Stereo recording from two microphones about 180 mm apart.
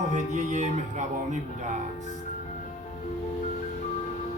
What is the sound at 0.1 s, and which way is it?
Speech, 40° right (ahead or behind).